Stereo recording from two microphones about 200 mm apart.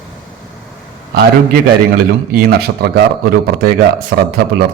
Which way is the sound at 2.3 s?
50° right (ahead or behind).